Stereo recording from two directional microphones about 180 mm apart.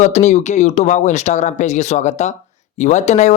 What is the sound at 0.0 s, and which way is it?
Speech, 40° left (ahead or behind).